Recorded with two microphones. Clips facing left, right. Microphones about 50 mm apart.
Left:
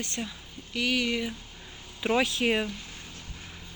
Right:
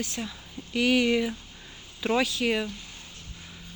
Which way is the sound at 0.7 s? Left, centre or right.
Centre.